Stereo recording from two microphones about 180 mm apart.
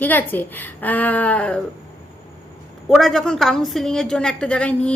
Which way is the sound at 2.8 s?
Centre (ahead or behind).